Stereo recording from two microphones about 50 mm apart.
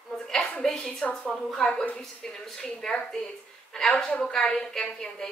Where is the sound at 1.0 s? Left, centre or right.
Left; by 3.0 s centre.